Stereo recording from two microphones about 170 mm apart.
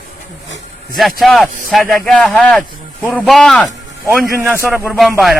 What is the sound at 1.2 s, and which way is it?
Speech, centre (ahead or behind).